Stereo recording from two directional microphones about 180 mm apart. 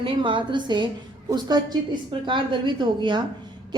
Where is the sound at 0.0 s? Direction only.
30° right (ahead or behind).